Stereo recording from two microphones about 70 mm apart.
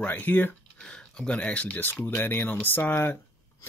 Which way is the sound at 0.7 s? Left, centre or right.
Centre.